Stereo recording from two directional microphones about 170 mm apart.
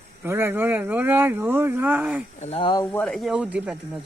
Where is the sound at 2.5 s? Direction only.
25° left (ahead or behind).